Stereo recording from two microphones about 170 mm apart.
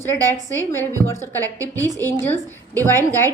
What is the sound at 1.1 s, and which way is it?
A woman's voice, 15° left (ahead or behind).